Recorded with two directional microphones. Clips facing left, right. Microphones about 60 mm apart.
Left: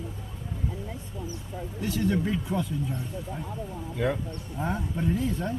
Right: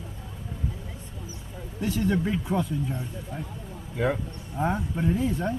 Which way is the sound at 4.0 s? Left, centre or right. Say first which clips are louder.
Right 2 dB; centre.